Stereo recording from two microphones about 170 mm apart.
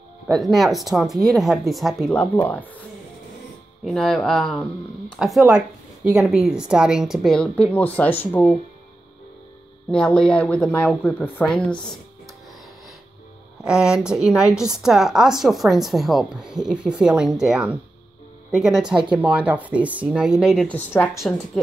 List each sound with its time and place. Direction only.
0.3 s a woman's voice: centre (ahead or behind)
3.8 s a woman's voice: 5° left (ahead or behind)
9.8 s a woman's voice: 5° left (ahead or behind)
13.7 s a woman's voice: 5° right (ahead or behind)
20.7 s a woman's voice: 15° left (ahead or behind)